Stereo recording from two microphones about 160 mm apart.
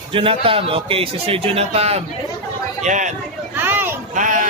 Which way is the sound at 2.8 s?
50° right (ahead or behind).